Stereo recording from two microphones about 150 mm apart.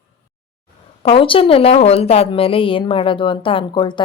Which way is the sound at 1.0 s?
35° left (ahead or behind).